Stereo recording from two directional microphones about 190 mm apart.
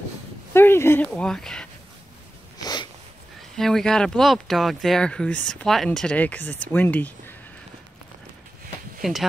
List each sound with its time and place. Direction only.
0.5 s speech: 10° left (ahead or behind)
2.6 s a sound: 20° left (ahead or behind)
3.5 s speech: centre (ahead or behind)
9.0 s speech: centre (ahead or behind)